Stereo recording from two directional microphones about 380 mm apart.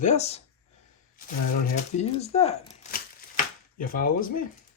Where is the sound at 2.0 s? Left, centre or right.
Centre.